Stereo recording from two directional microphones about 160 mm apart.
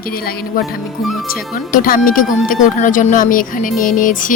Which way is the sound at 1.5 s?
60° left (ahead or behind).